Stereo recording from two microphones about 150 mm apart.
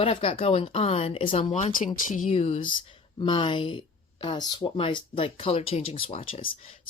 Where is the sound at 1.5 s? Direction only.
55° left (ahead or behind).